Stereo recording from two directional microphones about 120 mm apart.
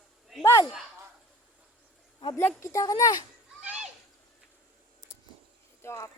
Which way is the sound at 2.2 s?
40° left (ahead or behind).